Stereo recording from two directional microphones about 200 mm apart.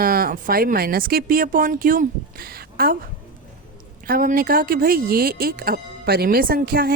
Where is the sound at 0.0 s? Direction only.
45° right (ahead or behind).